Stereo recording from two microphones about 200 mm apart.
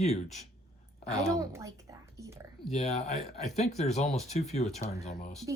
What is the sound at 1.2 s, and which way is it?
Speech, 15° right (ahead or behind).